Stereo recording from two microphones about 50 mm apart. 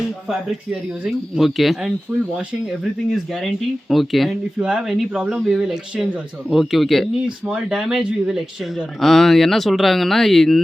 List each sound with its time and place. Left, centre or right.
1.4 s speech: centre
3.1 s speech: centre
4.5 s speech: right
4.9 s speech: centre
7.5 s speech: centre
9.0 s speech: centre